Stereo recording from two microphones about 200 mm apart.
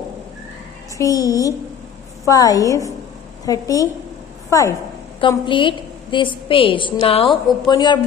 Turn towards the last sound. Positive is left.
turn(degrees=20)  # may be behind; listen again after turning